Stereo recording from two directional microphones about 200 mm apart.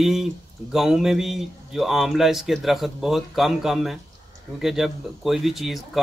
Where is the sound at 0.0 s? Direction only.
Centre (ahead or behind).